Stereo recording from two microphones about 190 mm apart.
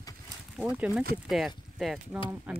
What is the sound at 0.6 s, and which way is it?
Speech, 5° right (ahead or behind).